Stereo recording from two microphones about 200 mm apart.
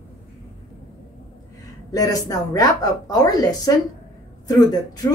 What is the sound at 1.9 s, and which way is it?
A woman's voice, 20° left (ahead or behind).